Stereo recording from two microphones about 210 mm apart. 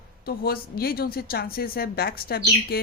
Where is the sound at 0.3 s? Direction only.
45° left (ahead or behind).